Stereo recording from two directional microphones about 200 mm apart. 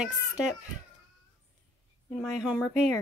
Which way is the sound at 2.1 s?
Centre (ahead or behind).